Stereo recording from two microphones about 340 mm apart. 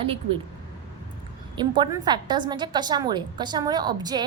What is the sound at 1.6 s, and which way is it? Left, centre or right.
A woman's voice, centre.